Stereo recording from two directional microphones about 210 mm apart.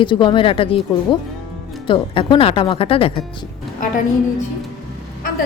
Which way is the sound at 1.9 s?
25° left (ahead or behind).